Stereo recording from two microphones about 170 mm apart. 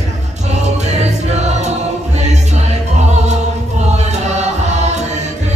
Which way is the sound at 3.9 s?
40° right (ahead or behind).